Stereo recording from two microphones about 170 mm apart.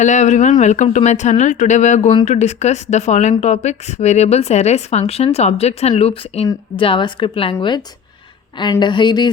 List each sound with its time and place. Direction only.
0.0 s speech: 45° left (ahead or behind); by 9.3 s 25° left (ahead or behind)